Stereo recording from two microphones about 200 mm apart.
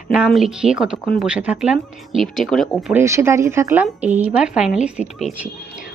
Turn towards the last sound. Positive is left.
turn(degrees=-5)  # may be behind; listen again after turning